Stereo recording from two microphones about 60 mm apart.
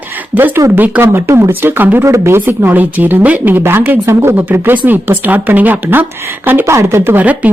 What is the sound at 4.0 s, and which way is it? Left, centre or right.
Speech, right.